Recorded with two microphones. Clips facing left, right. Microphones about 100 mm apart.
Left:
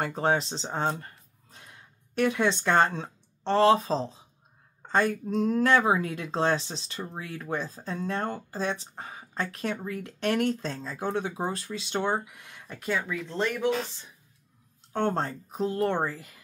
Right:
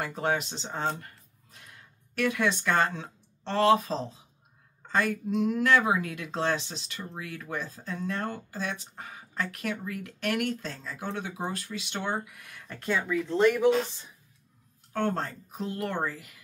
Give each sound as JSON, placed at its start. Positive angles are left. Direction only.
{"t": 0.0, "sound": "speech", "side_deg": 35}
{"t": 12.8, "sound": "speech", "side_deg": 5}
{"t": 14.9, "sound": "speech", "side_deg": 30}